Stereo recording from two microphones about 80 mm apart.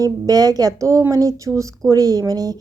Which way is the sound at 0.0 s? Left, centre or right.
Right.